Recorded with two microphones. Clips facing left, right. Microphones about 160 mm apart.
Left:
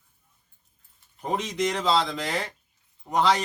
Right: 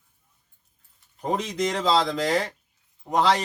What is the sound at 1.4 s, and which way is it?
Speech, 40° right (ahead or behind).